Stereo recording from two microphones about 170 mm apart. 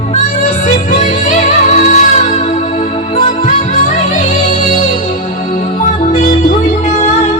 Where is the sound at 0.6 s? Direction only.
45° left (ahead or behind).